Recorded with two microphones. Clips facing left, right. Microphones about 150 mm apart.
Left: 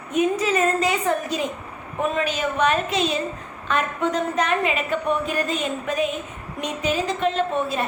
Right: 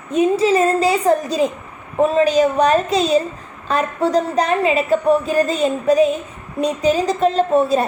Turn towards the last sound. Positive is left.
turn(degrees=-35)  # may be behind; listen again after turning